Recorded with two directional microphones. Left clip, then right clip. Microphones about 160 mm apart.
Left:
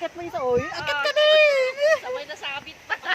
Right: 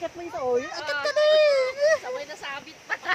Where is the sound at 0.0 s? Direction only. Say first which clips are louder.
Left 3 dB; 45° left (ahead or behind).